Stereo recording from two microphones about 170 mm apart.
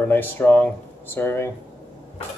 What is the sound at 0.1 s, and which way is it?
Speech, 10° left (ahead or behind).